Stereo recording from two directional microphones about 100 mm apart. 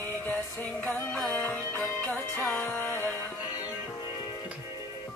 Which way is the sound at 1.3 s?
15° left (ahead or behind).